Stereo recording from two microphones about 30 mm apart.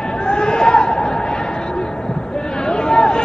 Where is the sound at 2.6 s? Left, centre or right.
Left.